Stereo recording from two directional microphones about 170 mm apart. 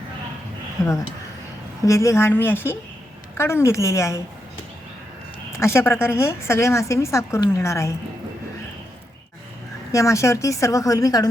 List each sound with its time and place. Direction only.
0.8 s a woman's voice: 20° left (ahead or behind)
5.5 s a woman's voice: 15° left (ahead or behind)
9.9 s speech: 20° left (ahead or behind)